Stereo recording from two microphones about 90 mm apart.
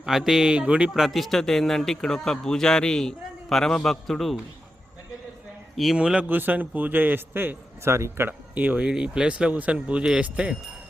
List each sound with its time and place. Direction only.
0.0 s a man's voice: 5° right (ahead or behind)
5.7 s a man's voice: 5° right (ahead or behind); by 8.3 s 30° right (ahead or behind)
8.3 s speech: 15° right (ahead or behind)